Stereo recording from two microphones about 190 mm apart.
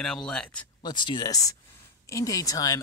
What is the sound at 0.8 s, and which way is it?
Speech, 25° left (ahead or behind).